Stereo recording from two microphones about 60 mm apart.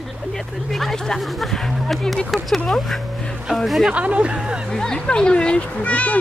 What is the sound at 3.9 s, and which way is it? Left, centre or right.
Speech, right.